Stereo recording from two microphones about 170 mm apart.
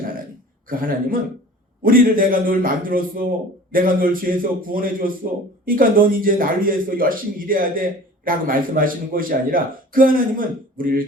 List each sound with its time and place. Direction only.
0.7 s a man's voice: 55° right (ahead or behind)